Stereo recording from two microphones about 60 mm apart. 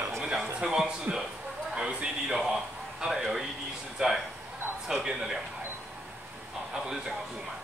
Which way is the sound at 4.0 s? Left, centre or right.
Centre.